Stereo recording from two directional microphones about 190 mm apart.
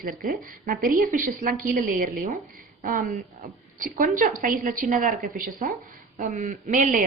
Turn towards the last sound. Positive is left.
turn(degrees=-45)  # may be behind; listen again after turning